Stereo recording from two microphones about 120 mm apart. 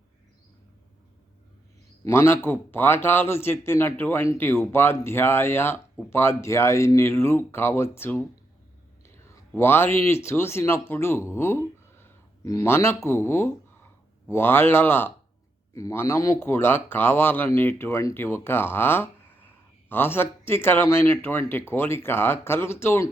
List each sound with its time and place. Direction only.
2.0 s speech: 20° left (ahead or behind)
9.0 s a sound: 20° left (ahead or behind)
9.6 s speech: 20° left (ahead or behind)